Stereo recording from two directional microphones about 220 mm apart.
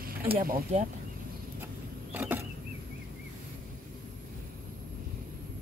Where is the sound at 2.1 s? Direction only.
10° right (ahead or behind).